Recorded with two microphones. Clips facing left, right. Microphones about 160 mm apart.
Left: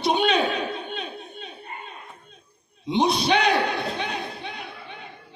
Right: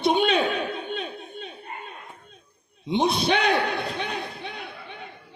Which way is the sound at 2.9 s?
55° right (ahead or behind).